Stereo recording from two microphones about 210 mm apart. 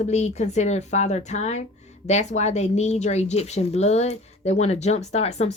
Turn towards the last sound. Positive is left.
turn(degrees=30)  # may be behind; listen again after turning